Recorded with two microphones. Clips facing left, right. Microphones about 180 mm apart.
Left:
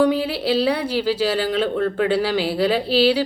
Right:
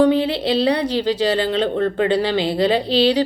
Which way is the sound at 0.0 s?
10° left (ahead or behind).